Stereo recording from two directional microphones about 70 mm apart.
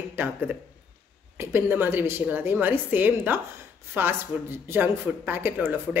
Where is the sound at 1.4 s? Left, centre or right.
Right.